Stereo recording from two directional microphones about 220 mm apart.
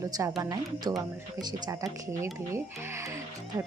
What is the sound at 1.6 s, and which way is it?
Speech, 15° right (ahead or behind).